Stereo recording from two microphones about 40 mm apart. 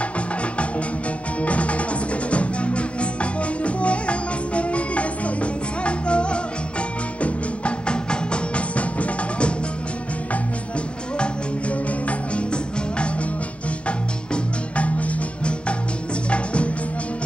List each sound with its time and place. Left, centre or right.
1.4 s music: left
13.8 s music: left